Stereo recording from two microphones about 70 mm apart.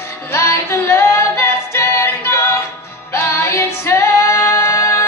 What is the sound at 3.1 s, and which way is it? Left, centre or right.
Music, left.